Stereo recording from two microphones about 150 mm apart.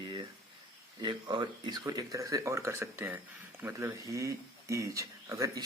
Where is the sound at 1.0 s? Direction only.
30° right (ahead or behind).